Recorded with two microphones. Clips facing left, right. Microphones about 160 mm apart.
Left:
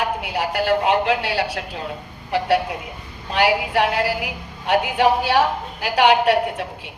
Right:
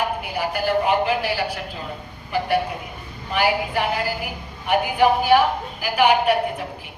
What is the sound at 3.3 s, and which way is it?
A woman's voice, 75° left (ahead or behind).